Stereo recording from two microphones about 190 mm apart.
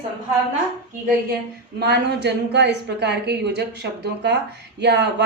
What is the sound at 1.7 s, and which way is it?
A woman's voice, 60° right (ahead or behind).